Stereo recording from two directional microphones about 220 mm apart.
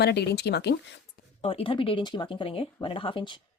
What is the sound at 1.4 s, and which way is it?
Speech, 25° left (ahead or behind).